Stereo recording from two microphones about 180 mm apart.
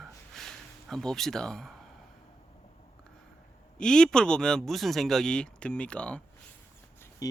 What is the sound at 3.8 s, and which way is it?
Speech, 5° left (ahead or behind).